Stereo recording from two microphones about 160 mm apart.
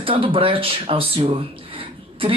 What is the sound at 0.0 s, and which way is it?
Speech, 35° right (ahead or behind).